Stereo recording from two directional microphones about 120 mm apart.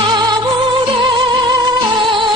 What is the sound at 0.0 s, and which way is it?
Music, 40° right (ahead or behind).